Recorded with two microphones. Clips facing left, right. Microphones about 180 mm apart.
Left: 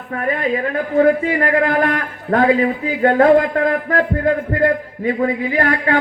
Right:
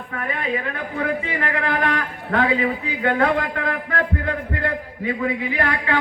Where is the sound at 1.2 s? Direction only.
45° left (ahead or behind).